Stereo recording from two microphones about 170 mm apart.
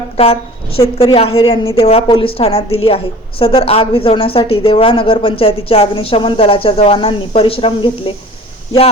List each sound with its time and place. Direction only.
0.2 s a woman's voice: 35° left (ahead or behind)